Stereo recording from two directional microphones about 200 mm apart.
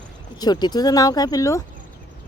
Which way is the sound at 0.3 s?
20° left (ahead or behind).